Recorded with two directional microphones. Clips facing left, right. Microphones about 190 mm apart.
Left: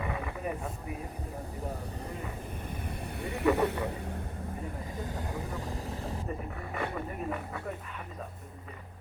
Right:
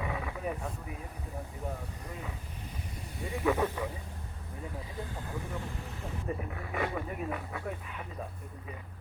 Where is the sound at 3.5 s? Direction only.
70° left (ahead or behind).